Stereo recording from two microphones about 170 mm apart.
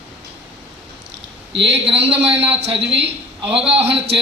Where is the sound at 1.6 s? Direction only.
35° right (ahead or behind).